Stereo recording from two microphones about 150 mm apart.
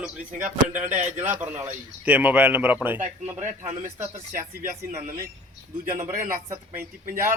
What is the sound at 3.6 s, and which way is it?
Speech, 50° right (ahead or behind).